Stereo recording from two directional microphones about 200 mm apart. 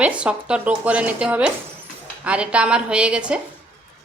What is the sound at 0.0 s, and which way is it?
A woman's voice, 5° right (ahead or behind).